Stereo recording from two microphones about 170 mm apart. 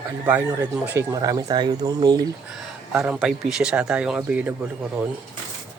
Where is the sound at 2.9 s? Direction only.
5° right (ahead or behind).